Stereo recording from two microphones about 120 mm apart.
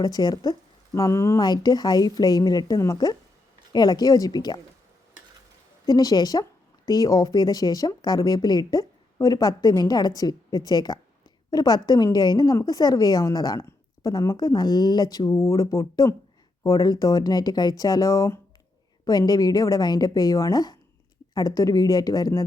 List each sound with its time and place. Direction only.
0.0 s speech: 35° left (ahead or behind)
1.4 s speech: 35° left (ahead or behind)
5.8 s speech: 30° left (ahead or behind)
15.3 s speech: 25° left (ahead or behind)